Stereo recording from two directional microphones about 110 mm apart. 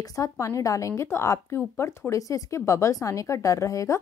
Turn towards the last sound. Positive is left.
turn(degrees=30)  # may be behind; listen again after turning